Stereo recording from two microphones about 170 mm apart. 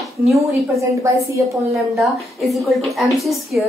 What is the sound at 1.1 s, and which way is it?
Speech, 15° right (ahead or behind).